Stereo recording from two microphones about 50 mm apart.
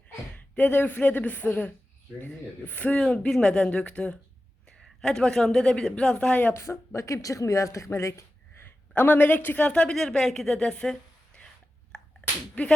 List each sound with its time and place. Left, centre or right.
0.3 s speech: left
3.0 s a man's voice: centre
6.5 s speech: left
7.9 s a sound: left
9.0 s speech: left
9.6 s speech: left
9.9 s a woman's voice: centre
11.9 s sneeze: centre
12.6 s speech: left